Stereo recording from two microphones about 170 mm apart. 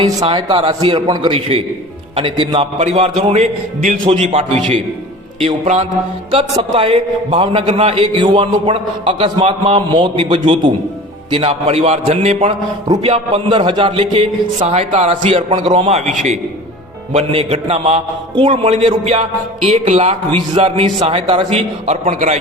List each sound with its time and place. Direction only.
0.0 s a man's voice: 25° right (ahead or behind); by 3.9 s 45° right (ahead or behind)
4.0 s a man's voice: 30° right (ahead or behind)
17.1 s a man's voice: 35° right (ahead or behind)